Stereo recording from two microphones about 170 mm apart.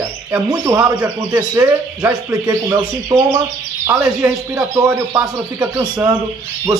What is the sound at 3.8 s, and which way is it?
Speech, 20° right (ahead or behind).